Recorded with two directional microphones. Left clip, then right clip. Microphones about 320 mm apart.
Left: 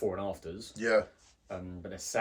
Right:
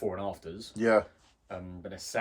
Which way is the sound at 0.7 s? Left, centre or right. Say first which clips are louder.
Right 3 dB; centre.